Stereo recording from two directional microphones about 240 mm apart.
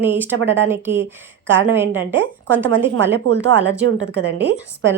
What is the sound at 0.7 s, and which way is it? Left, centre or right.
A woman's voice, centre.